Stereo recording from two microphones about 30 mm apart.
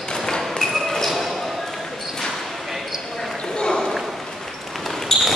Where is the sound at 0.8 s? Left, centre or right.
Centre.